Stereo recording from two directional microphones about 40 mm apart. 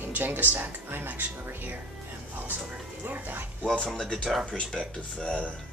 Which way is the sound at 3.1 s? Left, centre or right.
Right.